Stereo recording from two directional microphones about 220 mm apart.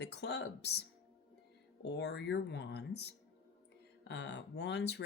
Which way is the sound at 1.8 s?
50° left (ahead or behind).